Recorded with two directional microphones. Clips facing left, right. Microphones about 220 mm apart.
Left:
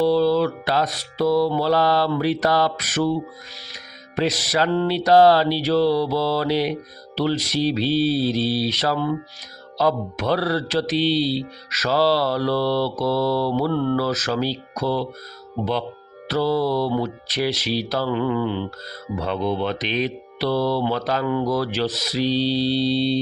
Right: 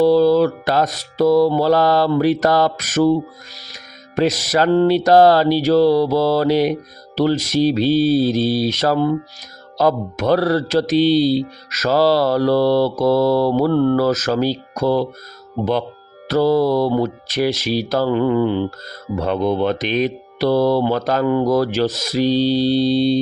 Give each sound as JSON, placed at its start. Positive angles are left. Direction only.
{"t": 0.0, "sound": "music", "side_deg": -45}
{"t": 16.3, "sound": "music", "side_deg": -45}